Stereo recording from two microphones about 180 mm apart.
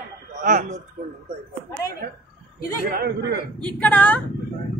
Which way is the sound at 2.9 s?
60° right (ahead or behind).